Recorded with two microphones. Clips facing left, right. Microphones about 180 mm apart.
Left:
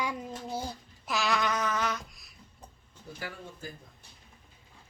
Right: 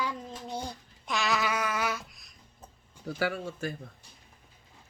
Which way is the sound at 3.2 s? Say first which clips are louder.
Right 11 dB; 80° right.